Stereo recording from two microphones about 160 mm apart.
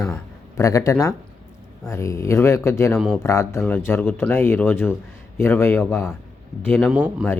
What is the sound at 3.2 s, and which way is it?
Speech, 15° left (ahead or behind).